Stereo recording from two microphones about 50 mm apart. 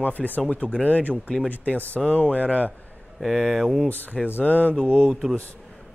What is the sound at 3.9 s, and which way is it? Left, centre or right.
Speech, left.